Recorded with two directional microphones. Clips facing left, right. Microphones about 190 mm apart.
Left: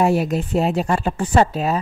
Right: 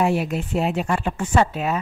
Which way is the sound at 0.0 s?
40° left (ahead or behind).